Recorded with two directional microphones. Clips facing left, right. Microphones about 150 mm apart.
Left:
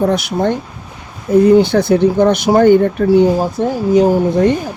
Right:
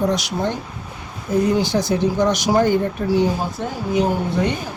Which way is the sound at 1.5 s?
60° left (ahead or behind).